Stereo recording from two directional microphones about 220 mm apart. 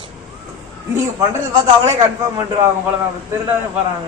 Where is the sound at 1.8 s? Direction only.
15° right (ahead or behind).